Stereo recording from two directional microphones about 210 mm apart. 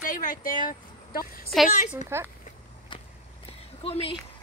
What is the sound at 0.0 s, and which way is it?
Speech, 40° left (ahead or behind).